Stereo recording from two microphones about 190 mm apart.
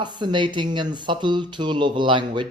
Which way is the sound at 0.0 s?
25° right (ahead or behind).